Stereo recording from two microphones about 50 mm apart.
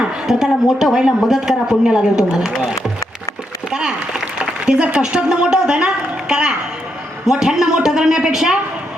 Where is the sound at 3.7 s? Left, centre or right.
Centre.